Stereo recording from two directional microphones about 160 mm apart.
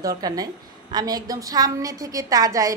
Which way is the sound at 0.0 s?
25° right (ahead or behind).